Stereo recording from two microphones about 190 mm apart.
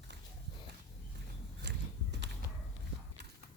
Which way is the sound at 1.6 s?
65° right (ahead or behind).